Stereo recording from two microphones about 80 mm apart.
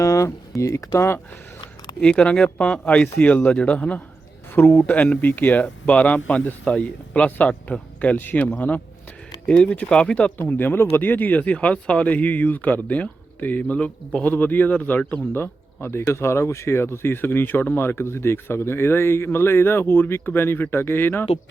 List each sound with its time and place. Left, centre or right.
0.0 s speech: left
2.0 s speech: centre
4.6 s speech: left
4.9 s speech: centre
10.3 s speech: left